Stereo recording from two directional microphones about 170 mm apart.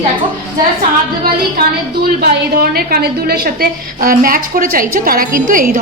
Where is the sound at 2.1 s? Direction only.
65° right (ahead or behind).